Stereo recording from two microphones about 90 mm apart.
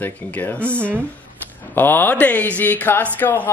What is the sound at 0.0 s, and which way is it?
Speech, 15° left (ahead or behind).